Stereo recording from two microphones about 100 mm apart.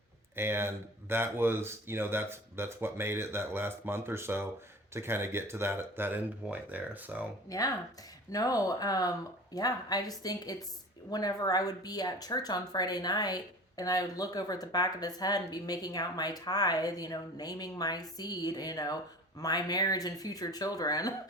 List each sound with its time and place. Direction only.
0.3 s speech: 25° right (ahead or behind)
7.4 s speech: 35° left (ahead or behind)